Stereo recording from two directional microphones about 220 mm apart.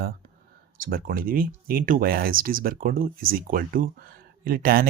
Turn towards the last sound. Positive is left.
turn(degrees=-40)  # may be behind; listen again after turning